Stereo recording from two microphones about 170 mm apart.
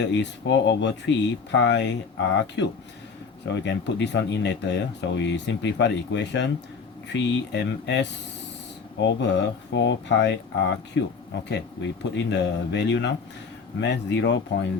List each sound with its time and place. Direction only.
0.0 s speech: 90° left